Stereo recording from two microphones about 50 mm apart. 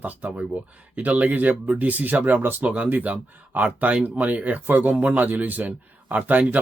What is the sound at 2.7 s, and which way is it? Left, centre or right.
Speech, right.